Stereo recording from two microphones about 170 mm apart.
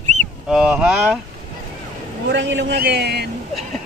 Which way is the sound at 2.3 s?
90° right.